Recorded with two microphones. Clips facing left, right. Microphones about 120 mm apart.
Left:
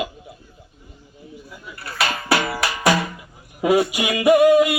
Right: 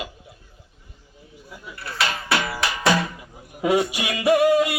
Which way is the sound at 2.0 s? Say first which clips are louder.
Left 3 dB; 25° left (ahead or behind).